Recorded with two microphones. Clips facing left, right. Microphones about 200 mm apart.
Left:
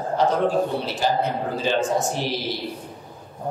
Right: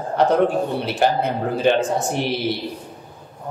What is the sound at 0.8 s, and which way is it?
A man's voice, 65° right (ahead or behind).